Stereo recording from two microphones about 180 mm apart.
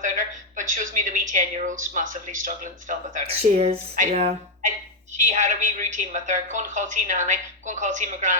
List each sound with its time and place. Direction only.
0.0 s a woman's voice: 45° right (ahead or behind)
3.2 s a woman's voice: 35° right (ahead or behind)